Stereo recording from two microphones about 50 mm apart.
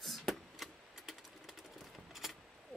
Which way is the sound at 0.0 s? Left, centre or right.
Centre.